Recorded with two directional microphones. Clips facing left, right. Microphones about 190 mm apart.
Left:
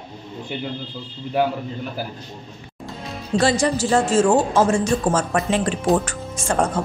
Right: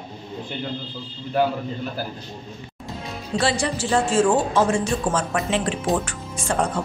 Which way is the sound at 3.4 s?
40° left (ahead or behind).